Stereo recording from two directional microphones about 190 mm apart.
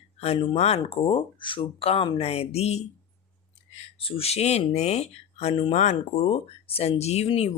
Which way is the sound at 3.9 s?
30° left (ahead or behind).